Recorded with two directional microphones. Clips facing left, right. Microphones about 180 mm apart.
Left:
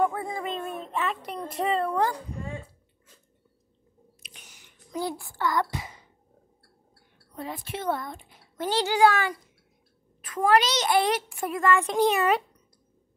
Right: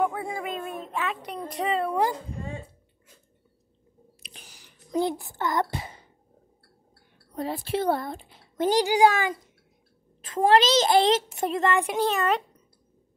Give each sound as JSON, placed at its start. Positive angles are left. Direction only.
{"t": 0.0, "sound": "speech", "side_deg": -5}
{"t": 4.2, "sound": "a sound", "side_deg": -35}
{"t": 4.9, "sound": "a child's voice", "side_deg": -20}
{"t": 7.3, "sound": "speech", "side_deg": -35}
{"t": 8.6, "sound": "speech", "side_deg": -15}
{"t": 10.2, "sound": "a child's voice", "side_deg": -25}
{"t": 12.0, "sound": "a child's voice", "side_deg": 10}